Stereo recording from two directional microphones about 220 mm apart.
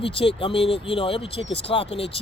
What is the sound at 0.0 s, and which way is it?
Speech, 25° left (ahead or behind).